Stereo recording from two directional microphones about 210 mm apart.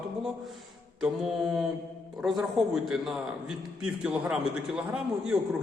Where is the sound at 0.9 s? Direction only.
Centre (ahead or behind).